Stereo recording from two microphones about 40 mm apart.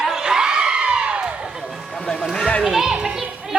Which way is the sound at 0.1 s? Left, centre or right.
Centre.